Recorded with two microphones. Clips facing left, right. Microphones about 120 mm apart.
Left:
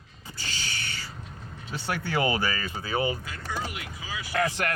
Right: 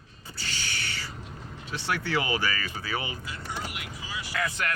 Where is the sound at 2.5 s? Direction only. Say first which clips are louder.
Left 4 dB; 25° left (ahead or behind).